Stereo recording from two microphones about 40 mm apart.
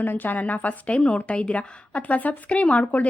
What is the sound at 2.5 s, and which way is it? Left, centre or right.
Speech, left.